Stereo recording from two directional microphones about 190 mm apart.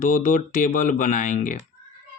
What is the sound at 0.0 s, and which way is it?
Speech, 45° left (ahead or behind).